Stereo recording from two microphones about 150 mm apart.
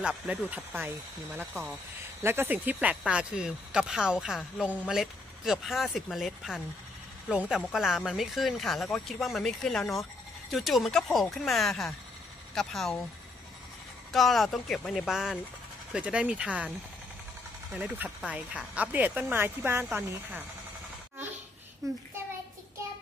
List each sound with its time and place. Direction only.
0.0 s speech: centre (ahead or behind)
0.5 s speech: 10° right (ahead or behind)
1.5 s speech: centre (ahead or behind)
2.2 s speech: 15° right (ahead or behind); by 13.0 s centre (ahead or behind)
14.1 s speech: centre (ahead or behind)
17.7 s speech: 10° right (ahead or behind)
21.8 s a child's voice: 20° right (ahead or behind)